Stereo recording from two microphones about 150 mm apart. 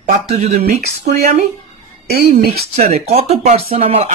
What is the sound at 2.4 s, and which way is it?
Speech, 90° right.